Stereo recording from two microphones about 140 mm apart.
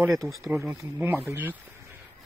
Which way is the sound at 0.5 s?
20° right (ahead or behind).